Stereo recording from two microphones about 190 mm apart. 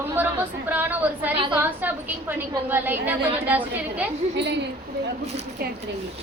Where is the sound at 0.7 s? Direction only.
10° right (ahead or behind).